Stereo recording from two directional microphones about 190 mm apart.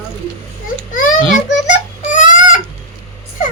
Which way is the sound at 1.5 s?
40° left (ahead or behind).